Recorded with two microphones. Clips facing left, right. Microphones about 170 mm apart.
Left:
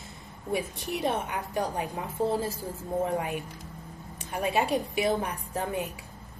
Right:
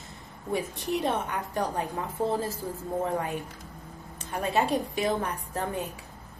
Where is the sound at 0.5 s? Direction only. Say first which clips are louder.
Right 2 dB; 10° left (ahead or behind).